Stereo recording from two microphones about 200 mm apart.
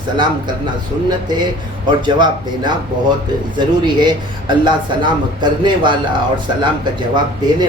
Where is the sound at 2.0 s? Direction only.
20° right (ahead or behind).